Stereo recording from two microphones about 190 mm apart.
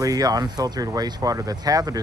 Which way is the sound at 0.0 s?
20° right (ahead or behind).